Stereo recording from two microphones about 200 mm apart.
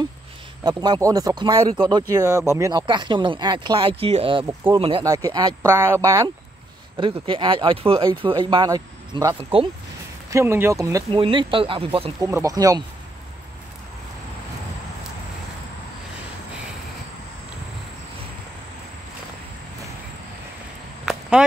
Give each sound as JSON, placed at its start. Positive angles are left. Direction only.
{"t": 0.7, "sound": "speech", "side_deg": -20}
{"t": 7.0, "sound": "speech", "side_deg": -25}
{"t": 10.3, "sound": "speech", "side_deg": -10}
{"t": 12.3, "sound": "speech", "side_deg": -15}
{"t": 21.0, "sound": "a sound", "side_deg": -5}